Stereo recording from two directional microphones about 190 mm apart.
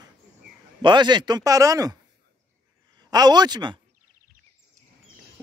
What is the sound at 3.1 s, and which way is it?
Speech, 20° right (ahead or behind).